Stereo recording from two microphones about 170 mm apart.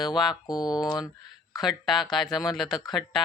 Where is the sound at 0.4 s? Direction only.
25° left (ahead or behind).